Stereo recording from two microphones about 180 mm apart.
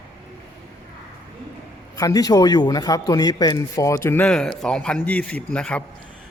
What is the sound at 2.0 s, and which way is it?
A man's voice, 20° left (ahead or behind).